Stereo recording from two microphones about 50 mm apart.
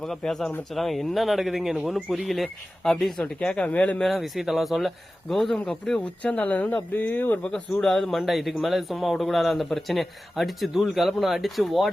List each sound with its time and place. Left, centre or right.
0.3 s speech: centre
3.4 s speech: left
4.0 s speech: centre
5.5 s speech: centre
6.0 s speech: left
7.8 s speech: centre
8.2 s speech: centre